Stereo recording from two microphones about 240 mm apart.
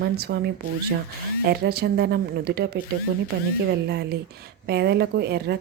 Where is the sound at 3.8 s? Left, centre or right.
Right.